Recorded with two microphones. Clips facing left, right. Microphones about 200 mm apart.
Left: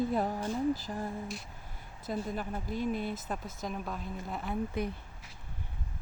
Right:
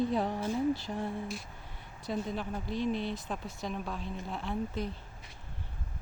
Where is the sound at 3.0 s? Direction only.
50° left (ahead or behind).